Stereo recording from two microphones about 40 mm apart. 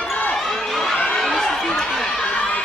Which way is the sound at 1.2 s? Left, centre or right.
Centre.